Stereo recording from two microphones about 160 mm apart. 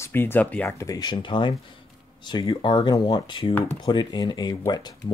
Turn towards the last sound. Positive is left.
turn(degrees=25)  # may be behind; listen again after turning